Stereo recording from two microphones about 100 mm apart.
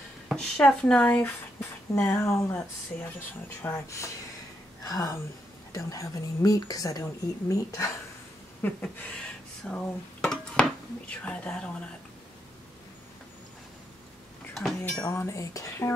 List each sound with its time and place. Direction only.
0.3 s speech: 5° left (ahead or behind)
1.2 s speech: 25° left (ahead or behind)
3.6 s a sound: 30° left (ahead or behind)
4.8 s a woman's voice: 40° left (ahead or behind)
8.6 s a sound: 20° left (ahead or behind)
9.7 s speech: 10° left (ahead or behind)
14.5 s cutlery: centre (ahead or behind)
15.0 s a woman's voice: 30° left (ahead or behind)